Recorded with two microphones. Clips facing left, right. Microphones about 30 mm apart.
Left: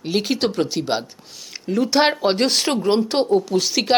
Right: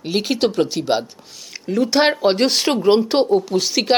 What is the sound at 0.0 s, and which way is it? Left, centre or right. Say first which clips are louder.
Speech: right 2 dB; centre.